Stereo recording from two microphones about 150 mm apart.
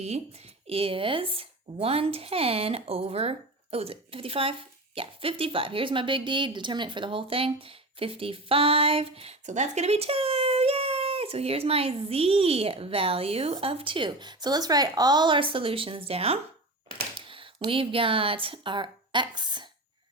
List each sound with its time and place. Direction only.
0.7 s speech: 40° right (ahead or behind)